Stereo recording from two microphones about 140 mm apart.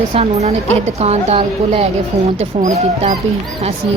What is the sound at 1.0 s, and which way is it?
A woman's voice, 50° right (ahead or behind).